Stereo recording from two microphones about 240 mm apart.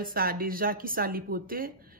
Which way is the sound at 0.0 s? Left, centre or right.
Right.